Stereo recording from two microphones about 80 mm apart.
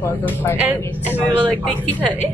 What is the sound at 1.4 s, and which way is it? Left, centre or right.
Speech, centre.